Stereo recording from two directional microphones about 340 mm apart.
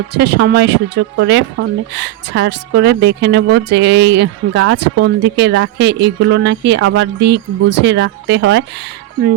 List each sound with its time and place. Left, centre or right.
0.1 s speech: right